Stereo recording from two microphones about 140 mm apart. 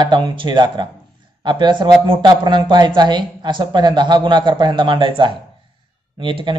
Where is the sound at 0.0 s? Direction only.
30° right (ahead or behind).